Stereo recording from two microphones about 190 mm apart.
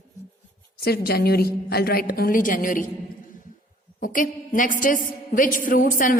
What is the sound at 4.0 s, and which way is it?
A woman's voice, 45° left (ahead or behind).